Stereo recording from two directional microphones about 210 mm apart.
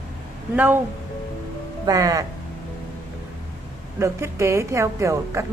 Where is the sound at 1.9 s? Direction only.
20° right (ahead or behind).